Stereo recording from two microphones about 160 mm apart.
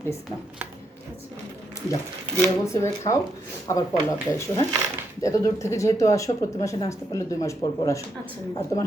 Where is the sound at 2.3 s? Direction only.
15° left (ahead or behind).